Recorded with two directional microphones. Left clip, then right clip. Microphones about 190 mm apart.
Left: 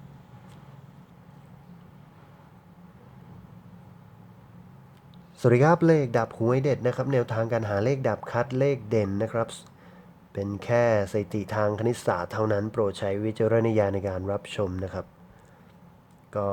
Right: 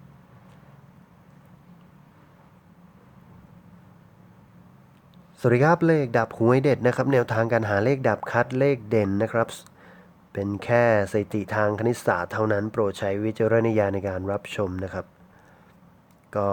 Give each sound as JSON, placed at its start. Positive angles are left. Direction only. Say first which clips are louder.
{"t": 5.4, "sound": "speech", "louder": "right 1 dB", "side_deg": -5}
{"t": 16.3, "sound": "speech", "louder": "right 3 dB", "side_deg": -15}